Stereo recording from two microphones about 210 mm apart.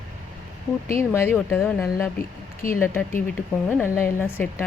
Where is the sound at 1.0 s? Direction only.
10° left (ahead or behind).